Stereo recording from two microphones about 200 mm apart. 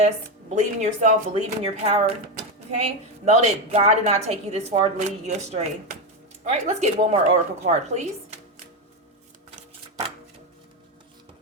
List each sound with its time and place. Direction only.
0.5 s a woman's voice: 35° right (ahead or behind)